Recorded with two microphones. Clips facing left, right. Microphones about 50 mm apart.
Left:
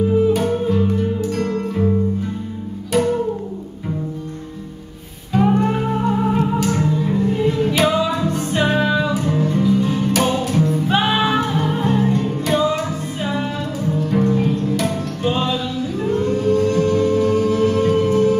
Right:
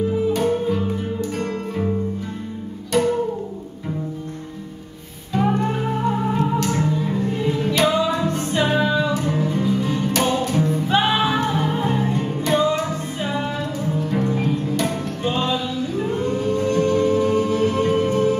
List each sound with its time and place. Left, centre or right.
0.3 s music: centre
5.5 s music: left
5.8 s music: centre
12.4 s music: centre